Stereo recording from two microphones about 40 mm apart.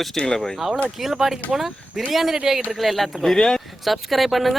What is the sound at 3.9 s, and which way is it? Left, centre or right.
Speech, centre.